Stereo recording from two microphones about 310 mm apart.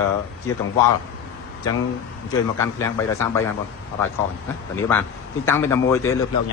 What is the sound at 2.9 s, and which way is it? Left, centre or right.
Speech, centre.